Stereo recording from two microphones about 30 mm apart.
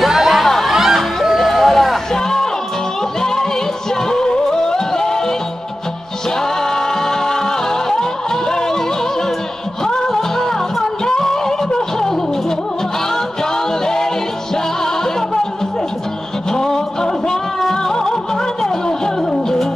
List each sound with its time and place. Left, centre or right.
0.0 s music: centre
0.7 s music: centre
2.2 s music: centre
6.6 s music: centre
9.8 s music: left
16.5 s music: left